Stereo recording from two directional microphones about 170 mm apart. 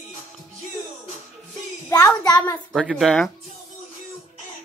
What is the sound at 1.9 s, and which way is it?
Child singing, 20° left (ahead or behind).